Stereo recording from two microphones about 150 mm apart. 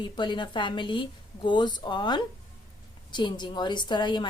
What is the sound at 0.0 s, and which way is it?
A woman's voice, 30° left (ahead or behind).